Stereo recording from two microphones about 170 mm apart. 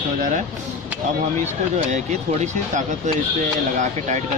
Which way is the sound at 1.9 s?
45° right (ahead or behind).